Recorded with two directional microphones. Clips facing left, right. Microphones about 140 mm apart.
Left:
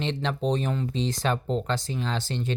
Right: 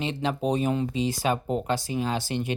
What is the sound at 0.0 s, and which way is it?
Speech, 5° right (ahead or behind).